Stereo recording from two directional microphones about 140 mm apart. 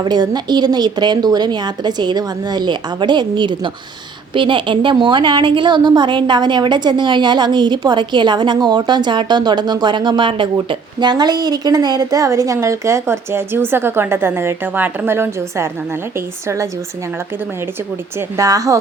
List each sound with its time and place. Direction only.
0.0 s a woman's voice: 30° right (ahead or behind)
18.3 s speech: 25° right (ahead or behind)